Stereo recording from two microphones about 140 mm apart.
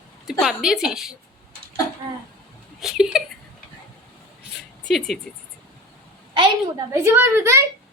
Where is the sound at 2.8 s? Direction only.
5° right (ahead or behind).